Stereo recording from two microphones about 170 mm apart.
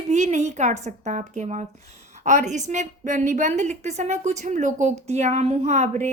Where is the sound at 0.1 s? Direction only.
45° right (ahead or behind).